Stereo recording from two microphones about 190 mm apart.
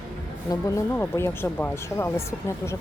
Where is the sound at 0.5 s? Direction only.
15° left (ahead or behind).